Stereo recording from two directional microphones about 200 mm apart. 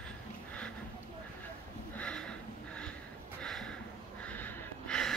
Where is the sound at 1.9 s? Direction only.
5° left (ahead or behind).